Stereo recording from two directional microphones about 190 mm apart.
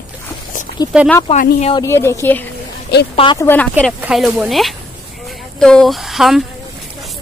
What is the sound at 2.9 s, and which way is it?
Speech, 60° left (ahead or behind).